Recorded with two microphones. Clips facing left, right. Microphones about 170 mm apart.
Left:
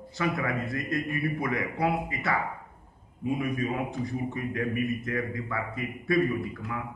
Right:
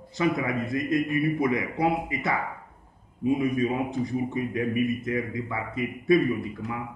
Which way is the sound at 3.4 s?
20° right (ahead or behind).